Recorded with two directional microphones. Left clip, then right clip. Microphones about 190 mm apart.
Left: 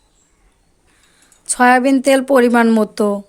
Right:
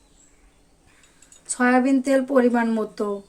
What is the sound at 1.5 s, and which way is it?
Speech, 50° left (ahead or behind).